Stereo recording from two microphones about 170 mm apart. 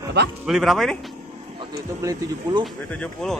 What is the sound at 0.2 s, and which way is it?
Speech, 80° right.